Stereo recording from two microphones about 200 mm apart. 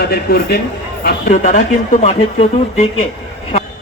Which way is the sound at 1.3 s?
40° left (ahead or behind).